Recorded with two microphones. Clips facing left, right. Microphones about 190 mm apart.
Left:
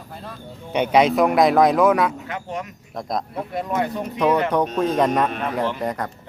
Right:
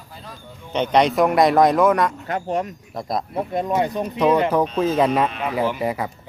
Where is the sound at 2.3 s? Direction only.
40° right (ahead or behind).